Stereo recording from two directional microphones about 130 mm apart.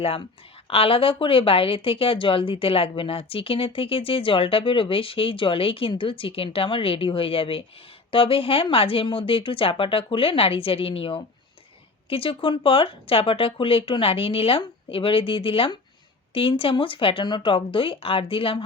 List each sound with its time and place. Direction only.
0.7 s speech: 45° left (ahead or behind)